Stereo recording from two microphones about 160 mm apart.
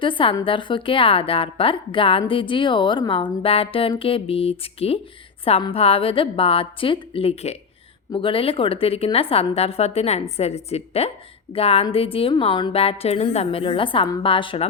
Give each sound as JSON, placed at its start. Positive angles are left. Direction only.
{"t": 0.0, "sound": "a woman's voice", "side_deg": 30}